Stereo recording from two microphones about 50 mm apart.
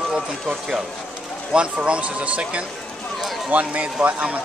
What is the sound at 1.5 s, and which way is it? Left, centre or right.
Speech, right.